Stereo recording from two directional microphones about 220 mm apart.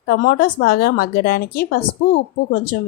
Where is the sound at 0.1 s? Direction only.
40° left (ahead or behind).